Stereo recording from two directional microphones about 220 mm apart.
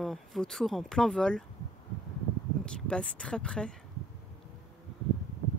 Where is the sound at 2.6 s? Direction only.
5° left (ahead or behind).